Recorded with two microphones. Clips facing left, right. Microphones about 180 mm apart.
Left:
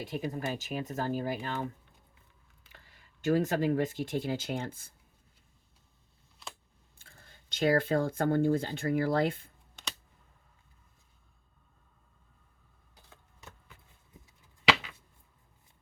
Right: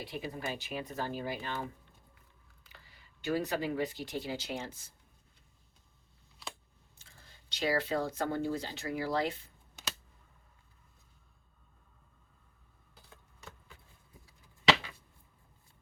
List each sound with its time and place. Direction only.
0.0 s speech: 45° left (ahead or behind)
2.7 s speech: 45° left (ahead or behind)
7.0 s speech: 55° left (ahead or behind)